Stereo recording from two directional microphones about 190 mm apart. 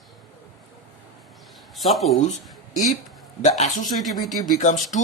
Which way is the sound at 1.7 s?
Centre (ahead or behind).